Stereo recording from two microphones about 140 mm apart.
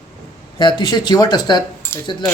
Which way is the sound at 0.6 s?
30° left (ahead or behind).